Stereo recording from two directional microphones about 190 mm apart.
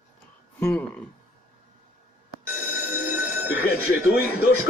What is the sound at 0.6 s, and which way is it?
Speech, 5° left (ahead or behind).